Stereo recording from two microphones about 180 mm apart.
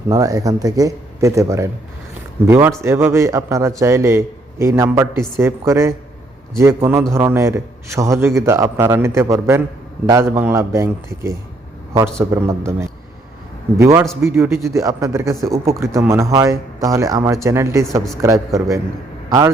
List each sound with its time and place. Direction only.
0.1 s a man's voice: 20° right (ahead or behind)
13.7 s a man's voice: 15° right (ahead or behind)